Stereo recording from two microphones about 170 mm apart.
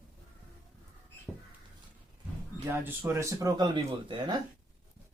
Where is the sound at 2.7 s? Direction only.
15° right (ahead or behind).